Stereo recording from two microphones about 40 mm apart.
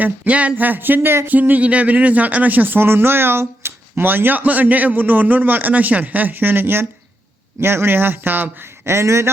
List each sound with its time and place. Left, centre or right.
0.0 s a sound: right
0.5 s speech: right
1.3 s speech: right
7.6 s a man's voice: right